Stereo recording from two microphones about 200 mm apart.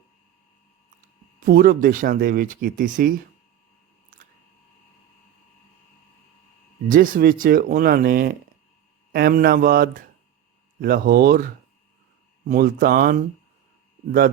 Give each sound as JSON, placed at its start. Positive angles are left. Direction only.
{"t": 1.5, "sound": "speech", "side_deg": -45}
{"t": 4.1, "sound": "chewing", "side_deg": -45}
{"t": 6.8, "sound": "speech", "side_deg": -45}
{"t": 12.5, "sound": "speech", "side_deg": -45}